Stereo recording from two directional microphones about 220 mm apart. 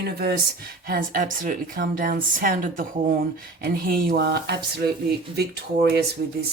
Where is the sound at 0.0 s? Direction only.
45° right (ahead or behind).